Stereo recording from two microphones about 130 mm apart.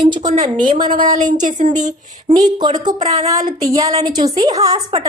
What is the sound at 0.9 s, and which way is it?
Speech, 80° right.